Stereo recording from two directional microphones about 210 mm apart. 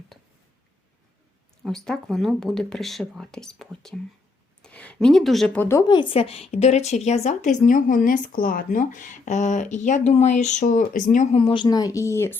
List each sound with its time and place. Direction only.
1.6 s speech: centre (ahead or behind)
5.6 s speech: 15° left (ahead or behind)